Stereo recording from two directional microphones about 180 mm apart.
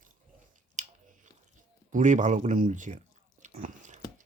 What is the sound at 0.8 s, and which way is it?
Chewing, 40° right (ahead or behind).